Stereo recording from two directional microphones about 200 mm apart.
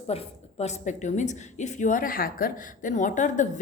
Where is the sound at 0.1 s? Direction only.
30° left (ahead or behind).